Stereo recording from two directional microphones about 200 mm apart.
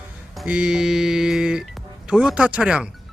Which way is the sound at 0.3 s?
5° right (ahead or behind).